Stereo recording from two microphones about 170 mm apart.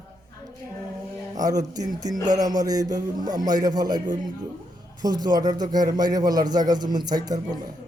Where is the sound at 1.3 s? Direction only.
20° right (ahead or behind).